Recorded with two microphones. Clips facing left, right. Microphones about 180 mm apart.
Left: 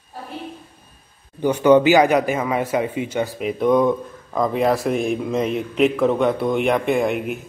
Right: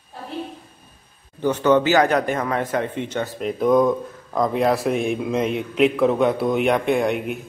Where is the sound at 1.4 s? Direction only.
15° left (ahead or behind).